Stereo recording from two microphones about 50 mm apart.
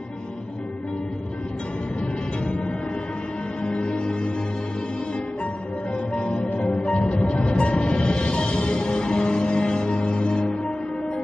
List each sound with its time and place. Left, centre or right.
3.6 s music: centre
6.1 s music: centre